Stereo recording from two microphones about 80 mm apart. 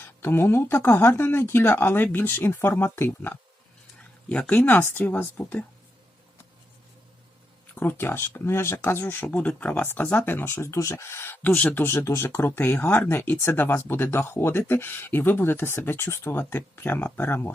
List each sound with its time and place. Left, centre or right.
0.0 s speech: left
7.8 s speech: left